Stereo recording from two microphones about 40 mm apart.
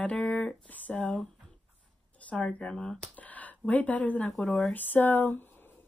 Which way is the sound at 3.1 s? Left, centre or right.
Left.